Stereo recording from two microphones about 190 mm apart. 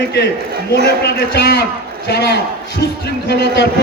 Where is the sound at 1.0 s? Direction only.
55° left (ahead or behind).